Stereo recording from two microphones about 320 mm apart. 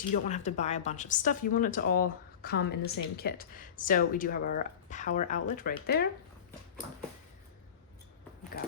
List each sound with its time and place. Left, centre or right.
0.1 s a woman's voice: left